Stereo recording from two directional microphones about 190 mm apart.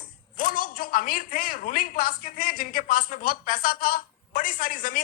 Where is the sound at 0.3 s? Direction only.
50° left (ahead or behind).